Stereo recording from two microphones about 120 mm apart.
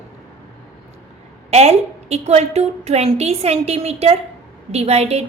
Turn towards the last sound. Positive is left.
turn(degrees=-60)  # may be behind; listen again after turning